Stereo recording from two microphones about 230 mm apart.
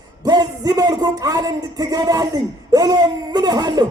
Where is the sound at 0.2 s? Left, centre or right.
Centre.